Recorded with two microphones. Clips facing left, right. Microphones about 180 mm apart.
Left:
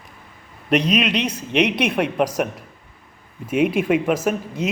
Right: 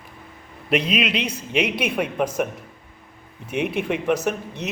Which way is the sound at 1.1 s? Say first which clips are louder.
Left 3 dB; 60° left (ahead or behind).